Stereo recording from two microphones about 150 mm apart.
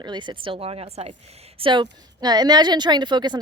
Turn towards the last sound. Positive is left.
turn(degrees=-30)  # may be behind; listen again after turning